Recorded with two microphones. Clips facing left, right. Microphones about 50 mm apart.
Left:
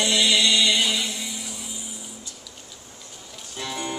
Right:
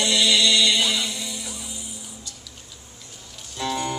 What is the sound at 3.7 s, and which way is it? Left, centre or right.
Music, centre.